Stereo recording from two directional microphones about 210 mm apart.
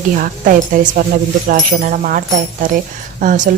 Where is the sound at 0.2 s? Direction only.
40° right (ahead or behind).